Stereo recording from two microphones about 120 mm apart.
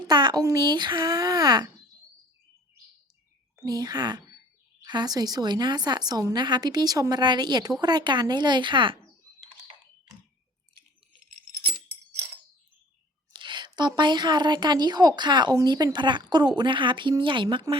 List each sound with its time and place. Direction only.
0.1 s a woman's voice: 40° right (ahead or behind)
3.6 s a woman's voice: 30° right (ahead or behind)
9.4 s computer keyboard: 50° right (ahead or behind)
13.3 s a woman's voice: 40° right (ahead or behind)